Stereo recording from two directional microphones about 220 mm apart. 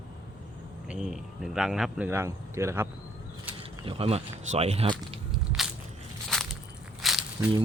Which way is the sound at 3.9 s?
25° right (ahead or behind).